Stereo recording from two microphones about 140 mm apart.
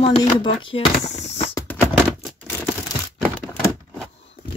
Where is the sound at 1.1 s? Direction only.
50° left (ahead or behind).